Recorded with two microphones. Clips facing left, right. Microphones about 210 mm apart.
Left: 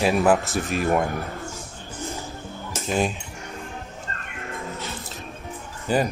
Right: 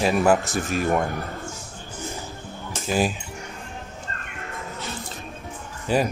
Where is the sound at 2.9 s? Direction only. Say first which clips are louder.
Right 1 dB; 5° right (ahead or behind).